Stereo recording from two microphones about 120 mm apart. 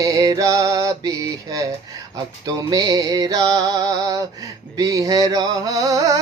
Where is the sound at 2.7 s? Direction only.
30° right (ahead or behind).